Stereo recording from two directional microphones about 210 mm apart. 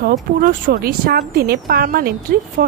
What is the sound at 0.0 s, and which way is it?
Speech, 40° right (ahead or behind).